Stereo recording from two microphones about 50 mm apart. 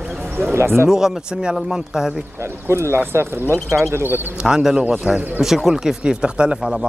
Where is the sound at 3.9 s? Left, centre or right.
Right.